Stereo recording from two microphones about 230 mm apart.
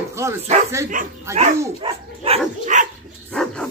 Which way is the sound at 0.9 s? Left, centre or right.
Right.